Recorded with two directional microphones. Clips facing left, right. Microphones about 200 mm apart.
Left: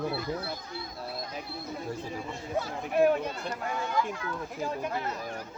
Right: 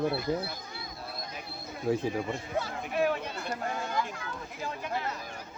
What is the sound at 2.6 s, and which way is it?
Speech, 50° left (ahead or behind).